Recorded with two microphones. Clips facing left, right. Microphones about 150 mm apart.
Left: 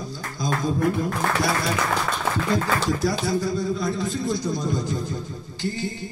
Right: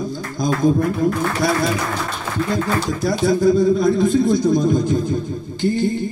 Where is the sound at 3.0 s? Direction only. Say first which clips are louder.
Right 8 dB; 55° right (ahead or behind).